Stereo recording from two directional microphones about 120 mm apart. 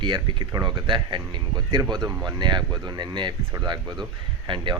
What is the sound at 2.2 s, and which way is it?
Speech, 35° right (ahead or behind).